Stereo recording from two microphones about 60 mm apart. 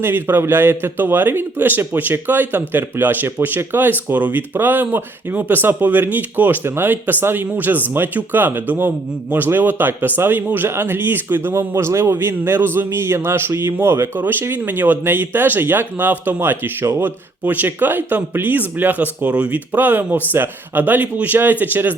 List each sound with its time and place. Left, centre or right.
0.0 s a man's voice: right
11.7 s a man's voice: right